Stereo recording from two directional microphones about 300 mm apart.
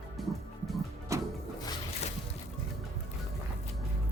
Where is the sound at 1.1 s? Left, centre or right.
Centre.